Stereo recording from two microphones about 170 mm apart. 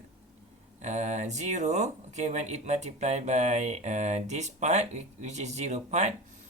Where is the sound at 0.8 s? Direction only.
45° right (ahead or behind).